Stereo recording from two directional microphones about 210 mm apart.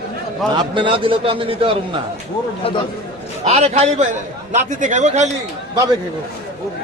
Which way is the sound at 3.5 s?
30° right (ahead or behind).